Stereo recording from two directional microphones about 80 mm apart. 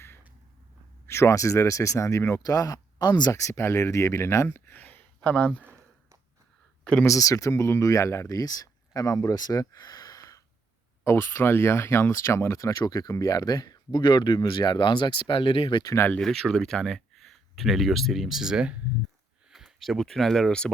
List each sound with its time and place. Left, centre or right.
1.0 s speech: left
3.3 s speech: left
4.5 s speech: left
7.0 s speech: left
11.0 s speech: left
16.2 s speech: centre